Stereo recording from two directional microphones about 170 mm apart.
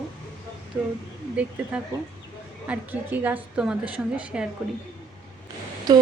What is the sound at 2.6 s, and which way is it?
A woman's voice, 10° right (ahead or behind).